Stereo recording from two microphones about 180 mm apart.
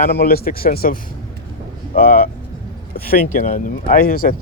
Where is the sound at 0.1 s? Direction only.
60° left (ahead or behind).